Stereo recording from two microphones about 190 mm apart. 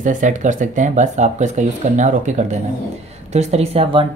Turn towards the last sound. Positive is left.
turn(degrees=-30)  # may be behind; listen again after turning